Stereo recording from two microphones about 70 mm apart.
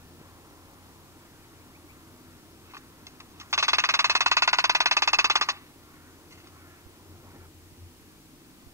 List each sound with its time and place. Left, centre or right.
2.7 s ringtone: right